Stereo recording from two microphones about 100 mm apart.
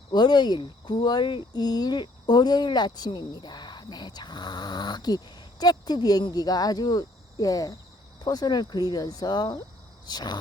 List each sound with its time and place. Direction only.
0.1 s speech: 45° left (ahead or behind)